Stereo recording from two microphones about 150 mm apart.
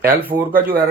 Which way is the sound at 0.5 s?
90° right.